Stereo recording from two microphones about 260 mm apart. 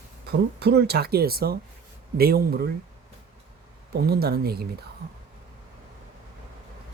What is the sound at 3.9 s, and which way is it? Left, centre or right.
Speech, right.